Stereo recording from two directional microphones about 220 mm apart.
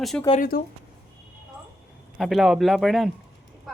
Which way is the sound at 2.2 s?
Centre (ahead or behind).